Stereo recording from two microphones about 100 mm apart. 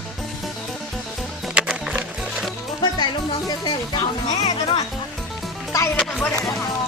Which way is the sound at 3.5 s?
50° left (ahead or behind).